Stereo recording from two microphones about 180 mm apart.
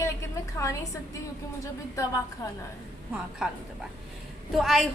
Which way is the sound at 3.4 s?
5° right (ahead or behind).